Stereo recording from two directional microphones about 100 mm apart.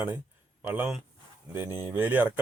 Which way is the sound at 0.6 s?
20° right (ahead or behind).